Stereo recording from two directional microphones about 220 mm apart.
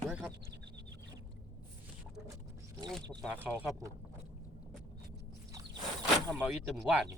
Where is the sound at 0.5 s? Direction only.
50° right (ahead or behind).